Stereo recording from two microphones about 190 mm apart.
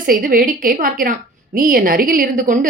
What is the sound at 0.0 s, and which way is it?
A woman's voice, 50° right (ahead or behind).